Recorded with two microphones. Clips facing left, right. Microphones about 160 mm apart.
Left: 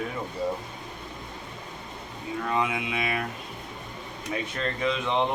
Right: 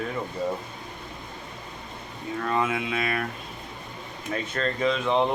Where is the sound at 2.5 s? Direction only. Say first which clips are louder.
Right 2 dB; 15° left (ahead or behind).